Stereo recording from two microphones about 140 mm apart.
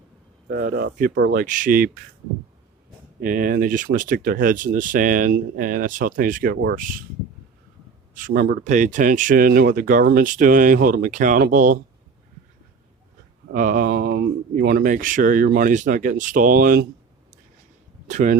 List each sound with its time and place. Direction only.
0.5 s speech: 90° right
3.2 s speech: 80° right
8.1 s speech: 80° right
13.5 s speech: 70° right (ahead or behind)
14.5 s speech: 85° right
18.1 s speech: 60° right (ahead or behind)